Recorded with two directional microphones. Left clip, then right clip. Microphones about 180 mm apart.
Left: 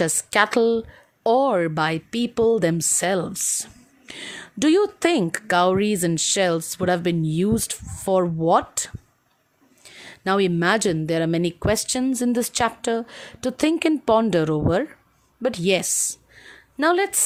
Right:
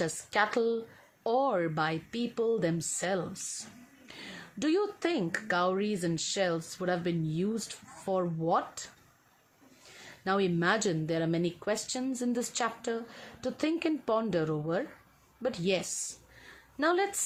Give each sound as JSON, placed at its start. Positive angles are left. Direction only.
{"t": 0.0, "sound": "speech", "side_deg": 60}
{"t": 10.2, "sound": "a woman's voice", "side_deg": 55}